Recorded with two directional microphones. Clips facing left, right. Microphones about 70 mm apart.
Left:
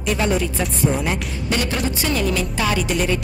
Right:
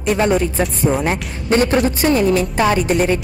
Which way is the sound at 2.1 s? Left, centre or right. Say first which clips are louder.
Right 6 dB; right.